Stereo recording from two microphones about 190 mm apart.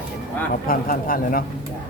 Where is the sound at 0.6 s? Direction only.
50° left (ahead or behind).